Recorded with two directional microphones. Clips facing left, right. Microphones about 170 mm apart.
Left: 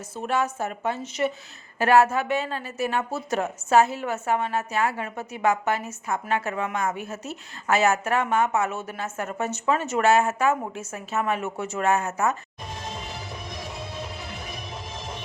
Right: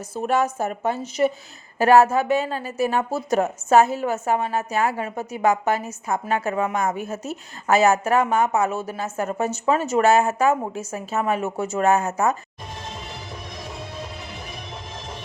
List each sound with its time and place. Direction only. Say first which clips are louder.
0.1 s a woman's voice: right 4 dB; 40° right (ahead or behind)